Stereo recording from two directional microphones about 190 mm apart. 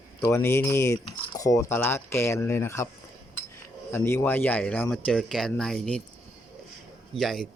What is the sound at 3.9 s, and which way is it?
Speech, 15° left (ahead or behind).